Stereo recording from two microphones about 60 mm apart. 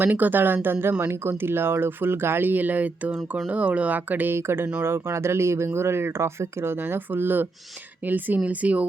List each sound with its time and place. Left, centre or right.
0.0 s speech: right
4.4 s speech: right